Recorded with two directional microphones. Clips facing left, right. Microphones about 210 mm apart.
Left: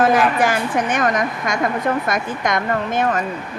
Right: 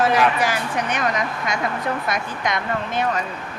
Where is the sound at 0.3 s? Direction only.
50° left (ahead or behind).